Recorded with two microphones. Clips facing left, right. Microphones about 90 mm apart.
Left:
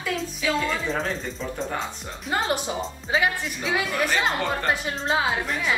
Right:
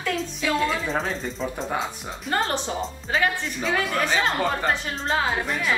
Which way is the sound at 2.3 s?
10° left (ahead or behind).